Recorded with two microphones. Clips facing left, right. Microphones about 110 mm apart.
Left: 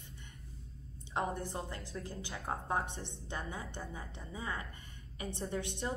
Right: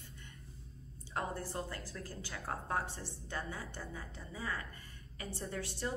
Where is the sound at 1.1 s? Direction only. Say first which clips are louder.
Left 2 dB; 20° left (ahead or behind).